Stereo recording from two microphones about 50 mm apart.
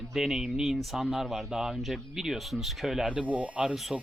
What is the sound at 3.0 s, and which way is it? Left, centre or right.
Speech, right.